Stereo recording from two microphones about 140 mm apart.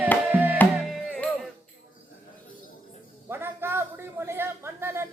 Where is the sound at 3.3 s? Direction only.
15° right (ahead or behind).